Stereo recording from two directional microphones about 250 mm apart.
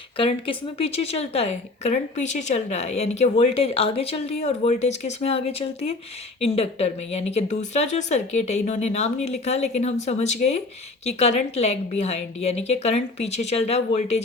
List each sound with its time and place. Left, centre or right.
0.2 s speech: left